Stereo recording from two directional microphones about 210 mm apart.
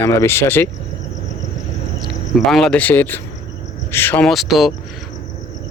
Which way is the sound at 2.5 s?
5° left (ahead or behind).